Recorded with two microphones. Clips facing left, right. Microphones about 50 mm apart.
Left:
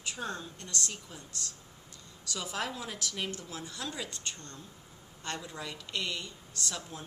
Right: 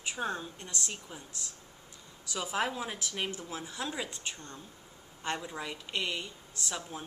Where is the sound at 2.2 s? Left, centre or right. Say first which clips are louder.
Right 3 dB; centre.